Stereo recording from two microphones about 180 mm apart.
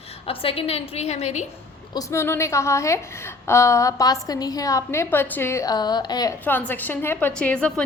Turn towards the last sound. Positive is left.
turn(degrees=5)  # may be behind; listen again after turning